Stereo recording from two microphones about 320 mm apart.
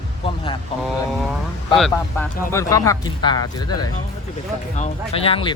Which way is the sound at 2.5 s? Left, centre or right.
Centre.